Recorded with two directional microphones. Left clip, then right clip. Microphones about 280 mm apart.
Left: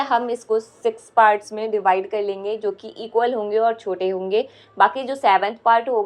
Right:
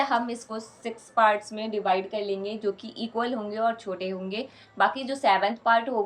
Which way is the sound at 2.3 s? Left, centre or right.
Centre.